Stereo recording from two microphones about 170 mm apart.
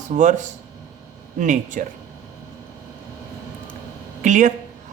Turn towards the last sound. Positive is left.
turn(degrees=-50)  # may be behind; listen again after turning